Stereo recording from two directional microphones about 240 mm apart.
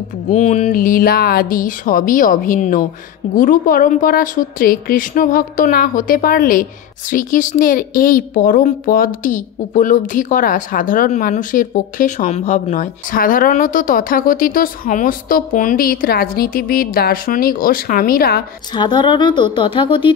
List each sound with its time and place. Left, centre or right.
0.3 s a woman's voice: left
18.8 s speech: centre